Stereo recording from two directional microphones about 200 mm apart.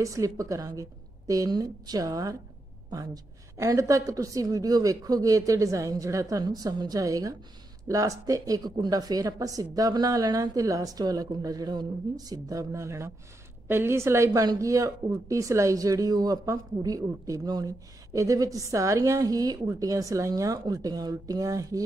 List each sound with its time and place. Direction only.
0.0 s speech: 15° right (ahead or behind)
3.5 s speech: 15° right (ahead or behind)